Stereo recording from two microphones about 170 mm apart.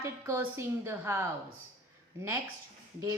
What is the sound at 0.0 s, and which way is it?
A woman's voice, 15° right (ahead or behind).